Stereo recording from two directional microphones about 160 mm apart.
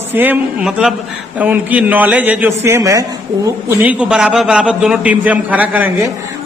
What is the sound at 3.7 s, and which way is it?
A man's voice, 10° right (ahead or behind).